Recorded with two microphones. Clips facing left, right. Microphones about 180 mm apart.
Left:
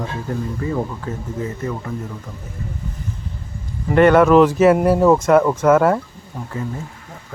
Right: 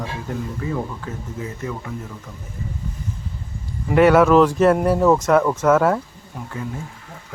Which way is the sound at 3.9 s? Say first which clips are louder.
Left 2 dB; 5° right (ahead or behind).